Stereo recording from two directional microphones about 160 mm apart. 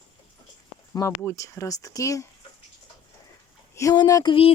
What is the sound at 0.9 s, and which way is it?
Speech, 15° left (ahead or behind).